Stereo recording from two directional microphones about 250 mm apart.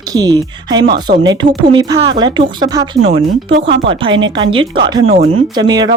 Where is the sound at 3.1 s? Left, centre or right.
Right.